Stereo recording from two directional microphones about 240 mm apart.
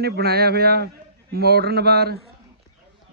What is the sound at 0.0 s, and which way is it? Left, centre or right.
Speech, right.